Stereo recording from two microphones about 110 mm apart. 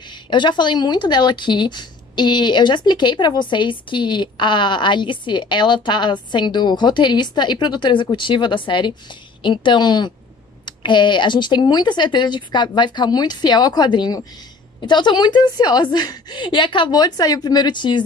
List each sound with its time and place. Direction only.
0.1 s speech: 45° left (ahead or behind)